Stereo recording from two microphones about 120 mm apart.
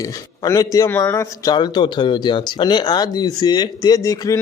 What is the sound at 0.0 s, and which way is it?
A man's voice, 30° left (ahead or behind).